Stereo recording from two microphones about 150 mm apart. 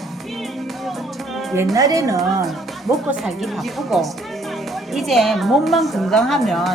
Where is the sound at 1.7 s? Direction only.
20° right (ahead or behind).